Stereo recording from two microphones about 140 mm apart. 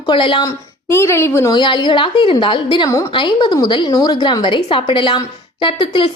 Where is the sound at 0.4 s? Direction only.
20° left (ahead or behind).